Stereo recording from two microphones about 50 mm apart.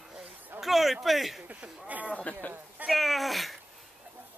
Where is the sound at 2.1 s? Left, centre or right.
Left.